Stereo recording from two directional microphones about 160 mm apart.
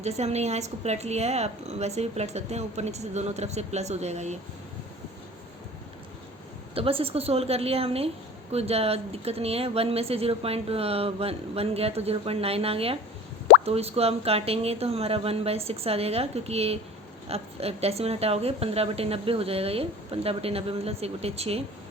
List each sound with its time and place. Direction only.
0.0 s a woman's voice: 45° right (ahead or behind)
6.7 s speech: 35° right (ahead or behind)